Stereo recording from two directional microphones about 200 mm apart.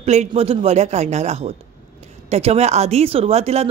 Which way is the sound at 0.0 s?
35° right (ahead or behind).